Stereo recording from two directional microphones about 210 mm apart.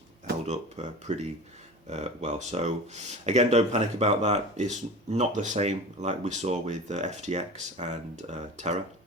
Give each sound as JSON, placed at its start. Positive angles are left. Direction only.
{"t": 0.4, "sound": "speech", "side_deg": -30}